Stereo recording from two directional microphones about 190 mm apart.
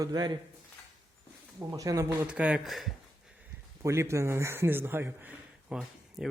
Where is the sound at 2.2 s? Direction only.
5° right (ahead or behind).